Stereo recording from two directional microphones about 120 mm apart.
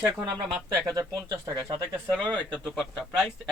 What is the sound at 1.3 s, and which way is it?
Speech, 25° right (ahead or behind).